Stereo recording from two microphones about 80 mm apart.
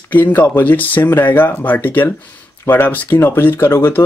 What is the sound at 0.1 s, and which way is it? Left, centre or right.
Speech, left.